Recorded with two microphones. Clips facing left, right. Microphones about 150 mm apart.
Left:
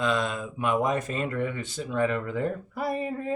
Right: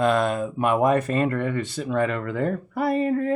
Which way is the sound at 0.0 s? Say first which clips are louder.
Right 6 dB; 55° right (ahead or behind).